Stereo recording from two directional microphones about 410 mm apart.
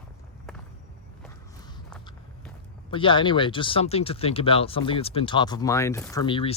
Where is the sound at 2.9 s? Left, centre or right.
Centre.